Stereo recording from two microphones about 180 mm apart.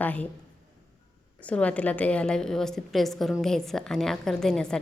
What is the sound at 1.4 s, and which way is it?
A woman's voice, 10° left (ahead or behind).